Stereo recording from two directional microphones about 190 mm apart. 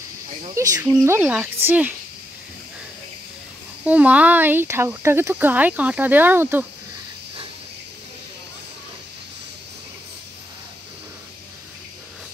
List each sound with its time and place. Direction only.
0.6 s speech: 15° right (ahead or behind)
3.8 s speech: 5° right (ahead or behind)